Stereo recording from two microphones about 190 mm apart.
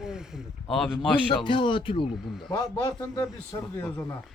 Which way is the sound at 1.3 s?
25° left (ahead or behind).